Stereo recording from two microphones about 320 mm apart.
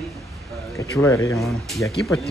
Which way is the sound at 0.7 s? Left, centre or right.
Centre.